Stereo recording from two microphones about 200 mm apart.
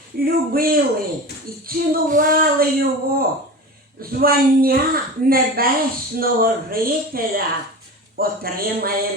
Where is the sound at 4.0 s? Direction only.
50° right (ahead or behind).